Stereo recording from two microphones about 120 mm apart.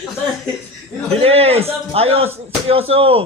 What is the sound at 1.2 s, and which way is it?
A man's voice, 55° right (ahead or behind).